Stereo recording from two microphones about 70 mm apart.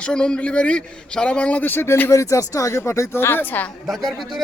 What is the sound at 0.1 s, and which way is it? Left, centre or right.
A man's voice, centre.